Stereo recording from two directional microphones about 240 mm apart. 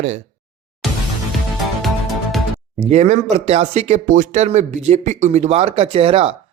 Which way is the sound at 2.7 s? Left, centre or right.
Right.